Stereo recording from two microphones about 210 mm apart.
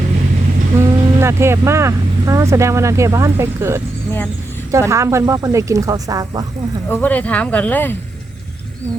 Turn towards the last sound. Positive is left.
turn(degrees=10)  # may be behind; listen again after turning